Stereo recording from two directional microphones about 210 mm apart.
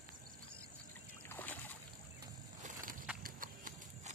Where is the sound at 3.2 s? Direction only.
40° right (ahead or behind).